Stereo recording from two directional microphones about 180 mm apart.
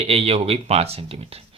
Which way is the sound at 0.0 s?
30° right (ahead or behind).